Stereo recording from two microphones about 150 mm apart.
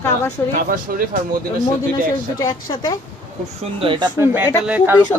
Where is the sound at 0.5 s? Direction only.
65° right (ahead or behind).